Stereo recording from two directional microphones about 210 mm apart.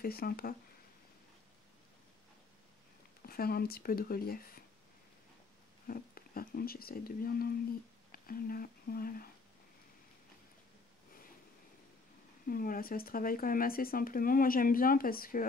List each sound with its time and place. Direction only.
0.0 s speech: 45° left (ahead or behind)
3.3 s speech: 45° left (ahead or behind)
5.9 s speech: 45° left (ahead or behind)
12.4 s speech: 40° left (ahead or behind)